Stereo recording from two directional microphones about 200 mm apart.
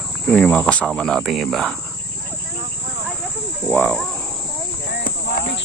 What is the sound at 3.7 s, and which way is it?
Speech, 5° left (ahead or behind).